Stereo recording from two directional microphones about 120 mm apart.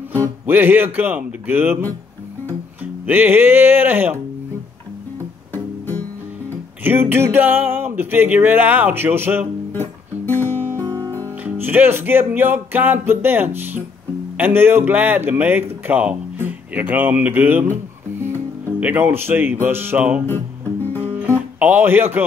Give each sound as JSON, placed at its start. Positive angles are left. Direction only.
{"t": 0.1, "sound": "speech", "side_deg": -20}
{"t": 5.5, "sound": "music", "side_deg": 15}
{"t": 6.8, "sound": "speech", "side_deg": -15}
{"t": 9.7, "sound": "music", "side_deg": 15}
{"t": 11.0, "sound": "music", "side_deg": -25}
{"t": 11.4, "sound": "speech", "side_deg": -15}
{"t": 21.5, "sound": "speech", "side_deg": -15}